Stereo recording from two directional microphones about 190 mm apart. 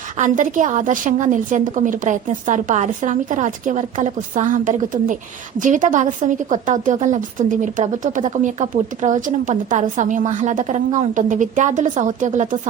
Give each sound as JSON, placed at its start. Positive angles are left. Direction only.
{"t": 0.2, "sound": "a woman's voice", "side_deg": -40}